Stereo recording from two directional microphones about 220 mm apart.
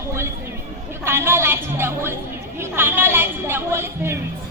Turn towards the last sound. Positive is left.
turn(degrees=-10)  # may be behind; listen again after turning